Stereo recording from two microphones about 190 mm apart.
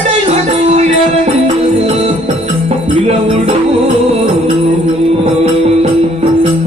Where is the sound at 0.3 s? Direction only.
35° right (ahead or behind).